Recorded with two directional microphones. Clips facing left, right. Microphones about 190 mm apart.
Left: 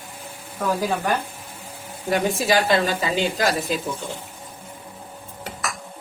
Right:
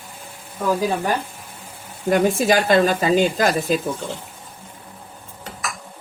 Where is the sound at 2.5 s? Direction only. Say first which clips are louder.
Right 2 dB; 50° right (ahead or behind).